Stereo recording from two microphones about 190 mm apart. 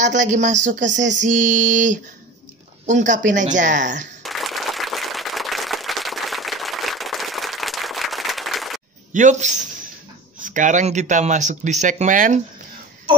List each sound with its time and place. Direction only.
0.0 s speech: 40° right (ahead or behind)
4.2 s applause: centre (ahead or behind)
9.1 s speech: 40° right (ahead or behind)